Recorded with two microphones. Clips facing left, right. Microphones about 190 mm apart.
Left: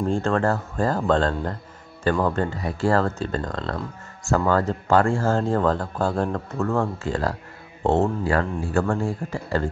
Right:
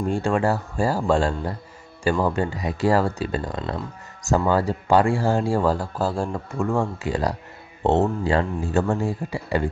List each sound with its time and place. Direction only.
0.0 s speech: 15° right (ahead or behind)